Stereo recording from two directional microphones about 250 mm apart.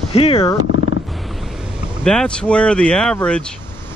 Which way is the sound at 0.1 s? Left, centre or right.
Left.